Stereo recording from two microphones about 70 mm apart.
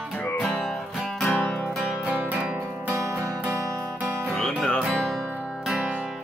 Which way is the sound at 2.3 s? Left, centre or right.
Centre.